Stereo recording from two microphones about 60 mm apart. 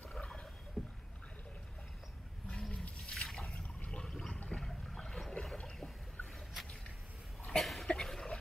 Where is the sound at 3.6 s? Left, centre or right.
Centre.